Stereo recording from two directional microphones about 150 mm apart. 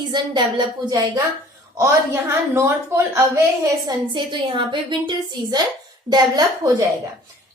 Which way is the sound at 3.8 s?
30° right (ahead or behind).